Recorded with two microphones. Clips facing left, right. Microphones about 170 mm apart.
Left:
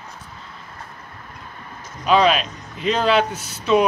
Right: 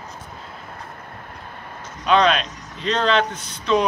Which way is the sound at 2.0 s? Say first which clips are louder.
Left 1 dB; 5° left (ahead or behind).